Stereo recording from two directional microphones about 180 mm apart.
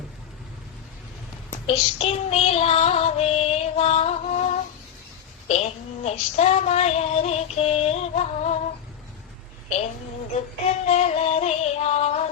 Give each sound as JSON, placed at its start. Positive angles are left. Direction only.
{"t": 1.6, "sound": "child singing", "side_deg": 30}
{"t": 10.8, "sound": "music", "side_deg": 35}